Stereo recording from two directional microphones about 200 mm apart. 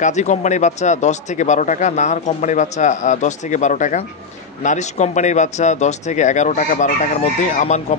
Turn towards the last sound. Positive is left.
turn(degrees=35)  # may be behind; listen again after turning